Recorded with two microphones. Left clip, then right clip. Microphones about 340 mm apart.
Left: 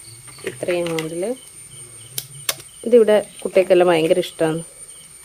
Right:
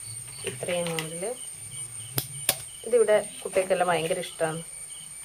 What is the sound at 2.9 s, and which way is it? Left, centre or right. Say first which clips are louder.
Speech: left 8 dB; left.